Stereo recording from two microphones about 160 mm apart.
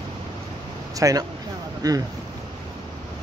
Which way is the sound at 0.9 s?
20° right (ahead or behind).